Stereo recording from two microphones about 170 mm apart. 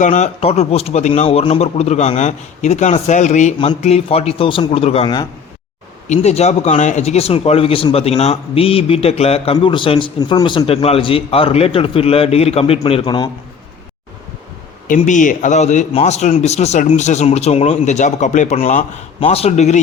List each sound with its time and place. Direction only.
0.0 s speech: 45° left (ahead or behind); by 13.3 s 25° left (ahead or behind)
14.8 s a man's voice: 50° left (ahead or behind)